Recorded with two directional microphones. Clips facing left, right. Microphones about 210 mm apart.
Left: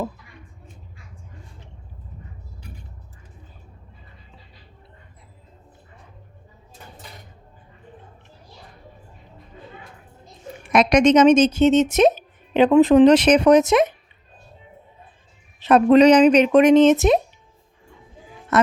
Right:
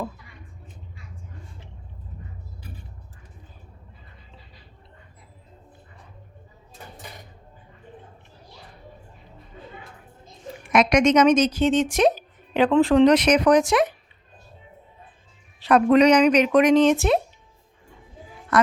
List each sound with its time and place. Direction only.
10.7 s speech: 35° left (ahead or behind)
15.6 s speech: 30° left (ahead or behind)
18.5 s music: 25° left (ahead or behind)